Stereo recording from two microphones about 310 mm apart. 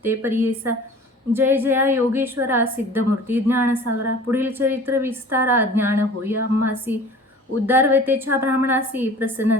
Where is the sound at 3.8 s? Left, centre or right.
Right.